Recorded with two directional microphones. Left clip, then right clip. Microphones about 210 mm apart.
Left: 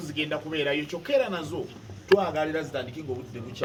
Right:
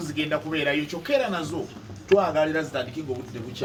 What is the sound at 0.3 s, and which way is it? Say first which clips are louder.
A man's voice: right 4 dB; 25° left (ahead or behind).